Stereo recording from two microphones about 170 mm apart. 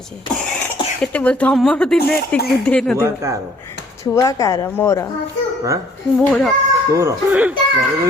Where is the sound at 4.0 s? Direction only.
20° left (ahead or behind).